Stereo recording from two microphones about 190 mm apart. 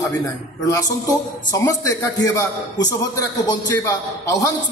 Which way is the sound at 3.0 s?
20° left (ahead or behind).